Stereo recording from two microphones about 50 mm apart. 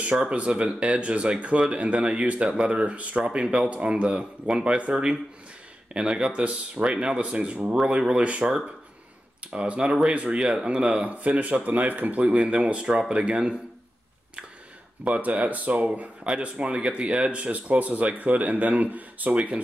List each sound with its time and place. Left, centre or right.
0.1 s speech: right
15.0 s speech: right